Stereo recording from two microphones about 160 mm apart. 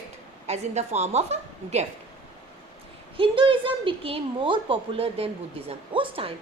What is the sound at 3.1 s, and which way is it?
A woman's voice, 35° right (ahead or behind).